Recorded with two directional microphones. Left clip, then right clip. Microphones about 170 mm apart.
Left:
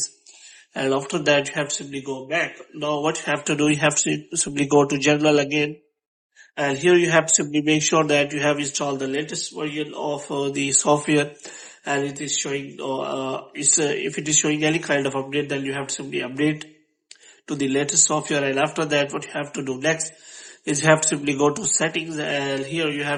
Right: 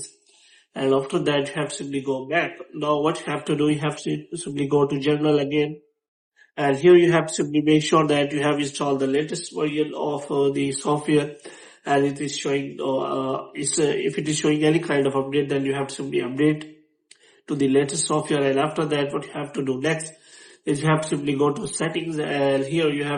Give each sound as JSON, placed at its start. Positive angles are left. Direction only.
{"t": 0.7, "sound": "speech", "side_deg": 30}
{"t": 11.9, "sound": "speech", "side_deg": 20}
{"t": 20.7, "sound": "speech", "side_deg": 35}